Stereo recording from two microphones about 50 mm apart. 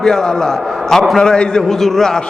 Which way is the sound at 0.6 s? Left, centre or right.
Centre.